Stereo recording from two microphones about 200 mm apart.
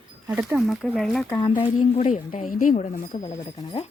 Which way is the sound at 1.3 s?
25° left (ahead or behind).